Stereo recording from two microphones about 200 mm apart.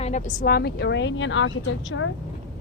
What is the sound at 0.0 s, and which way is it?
A woman's voice, 35° left (ahead or behind).